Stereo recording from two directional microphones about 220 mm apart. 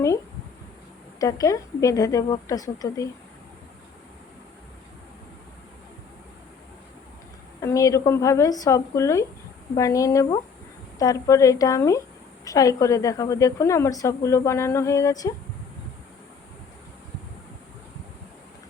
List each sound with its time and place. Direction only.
1.2 s a woman's voice: 15° left (ahead or behind)
7.6 s a woman's voice: 15° left (ahead or behind)